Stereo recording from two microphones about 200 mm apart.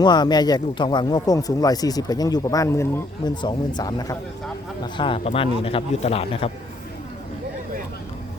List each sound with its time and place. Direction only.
0.0 s speech: 20° left (ahead or behind)